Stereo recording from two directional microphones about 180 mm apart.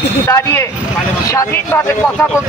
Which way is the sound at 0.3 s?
15° left (ahead or behind).